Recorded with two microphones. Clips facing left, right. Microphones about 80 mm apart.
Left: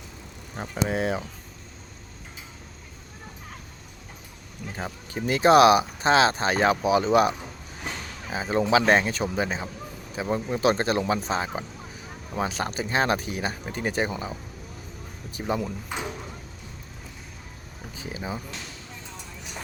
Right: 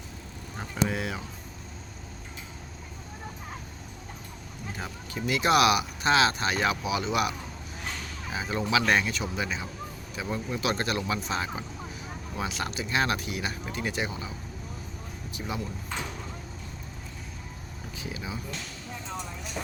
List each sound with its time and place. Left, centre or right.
0.5 s speech: left
4.8 s speech: left
15.4 s speech: left
15.9 s speech: centre
17.9 s speech: left